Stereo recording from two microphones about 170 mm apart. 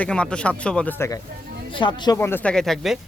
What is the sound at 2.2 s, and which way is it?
Speech, 10° left (ahead or behind).